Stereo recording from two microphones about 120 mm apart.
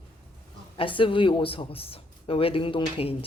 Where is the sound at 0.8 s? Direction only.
45° left (ahead or behind).